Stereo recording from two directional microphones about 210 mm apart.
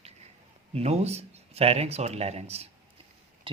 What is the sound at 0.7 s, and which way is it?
Speech, 30° right (ahead or behind).